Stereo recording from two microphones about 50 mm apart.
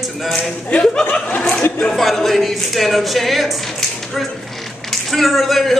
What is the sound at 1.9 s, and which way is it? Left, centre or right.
Speech, centre.